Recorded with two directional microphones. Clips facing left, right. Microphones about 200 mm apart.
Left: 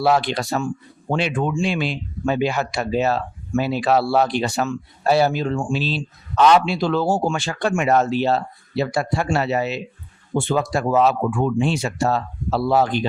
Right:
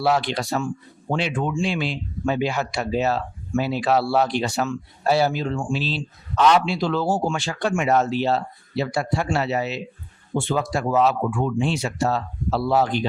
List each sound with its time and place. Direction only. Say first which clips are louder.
0.0 s speech: left 3 dB; 55° left (ahead or behind)